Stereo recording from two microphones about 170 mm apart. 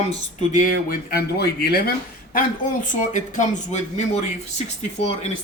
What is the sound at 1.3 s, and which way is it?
Speech, 70° left (ahead or behind).